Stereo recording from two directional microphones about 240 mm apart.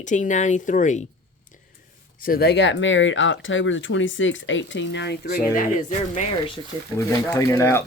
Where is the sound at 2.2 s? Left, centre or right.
Left.